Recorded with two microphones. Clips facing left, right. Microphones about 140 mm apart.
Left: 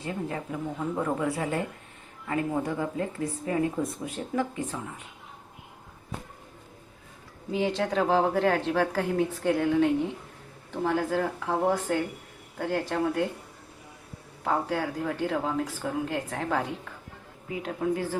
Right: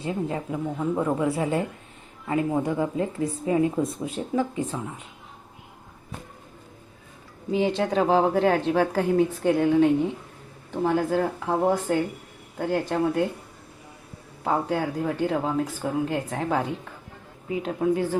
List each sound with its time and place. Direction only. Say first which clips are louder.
0.0 s speech: right 4 dB; 20° right (ahead or behind)
7.5 s speech: right 4 dB; 20° right (ahead or behind)
14.4 s speech: right 3 dB; 15° right (ahead or behind)